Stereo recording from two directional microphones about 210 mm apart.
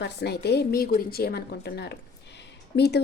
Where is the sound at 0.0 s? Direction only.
50° left (ahead or behind).